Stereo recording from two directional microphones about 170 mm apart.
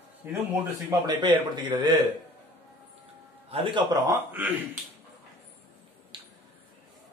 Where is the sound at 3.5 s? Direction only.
35° right (ahead or behind).